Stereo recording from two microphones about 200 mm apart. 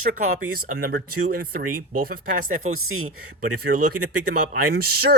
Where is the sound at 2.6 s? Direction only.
90° right.